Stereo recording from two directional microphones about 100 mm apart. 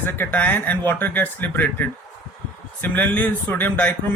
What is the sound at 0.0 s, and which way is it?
Speech, 20° left (ahead or behind).